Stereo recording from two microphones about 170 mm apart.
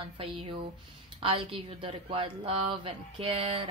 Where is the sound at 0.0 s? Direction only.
30° right (ahead or behind).